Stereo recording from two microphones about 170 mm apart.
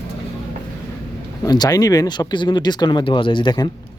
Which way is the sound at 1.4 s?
25° left (ahead or behind).